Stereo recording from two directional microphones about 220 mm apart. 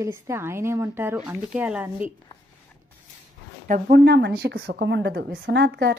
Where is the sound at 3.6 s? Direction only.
40° right (ahead or behind).